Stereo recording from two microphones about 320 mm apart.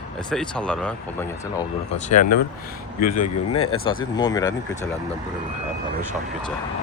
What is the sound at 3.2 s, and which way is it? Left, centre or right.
Speech, left.